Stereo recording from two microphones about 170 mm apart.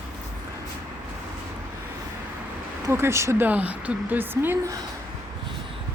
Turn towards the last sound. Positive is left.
turn(degrees=-10)  # may be behind; listen again after turning